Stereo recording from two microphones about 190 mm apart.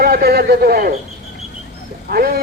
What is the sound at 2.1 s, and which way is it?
Speech, 55° right (ahead or behind).